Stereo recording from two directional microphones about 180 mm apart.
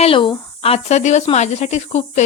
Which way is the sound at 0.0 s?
30° left (ahead or behind).